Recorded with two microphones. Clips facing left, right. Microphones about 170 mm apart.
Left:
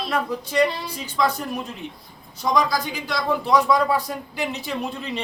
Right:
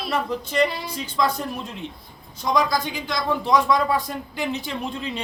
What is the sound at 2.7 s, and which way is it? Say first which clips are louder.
Speech: even; 5° left (ahead or behind).